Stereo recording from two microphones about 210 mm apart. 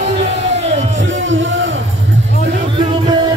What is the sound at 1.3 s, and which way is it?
Music, 60° right (ahead or behind).